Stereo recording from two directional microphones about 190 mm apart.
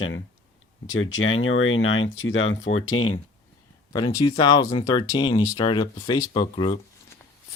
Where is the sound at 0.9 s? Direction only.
90° left.